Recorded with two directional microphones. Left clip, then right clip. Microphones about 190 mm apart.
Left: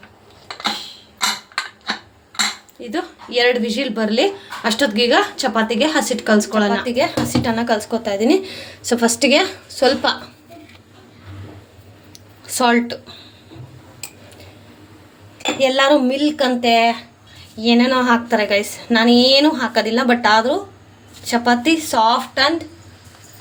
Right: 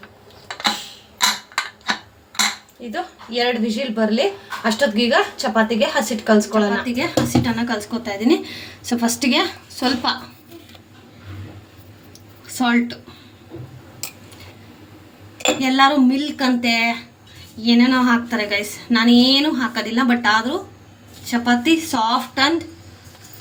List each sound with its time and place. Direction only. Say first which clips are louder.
2.9 s speech: left 4 dB; 55° left (ahead or behind)
12.5 s a woman's voice: left 4 dB; 50° left (ahead or behind)
15.6 s speech: left 2 dB; 50° left (ahead or behind)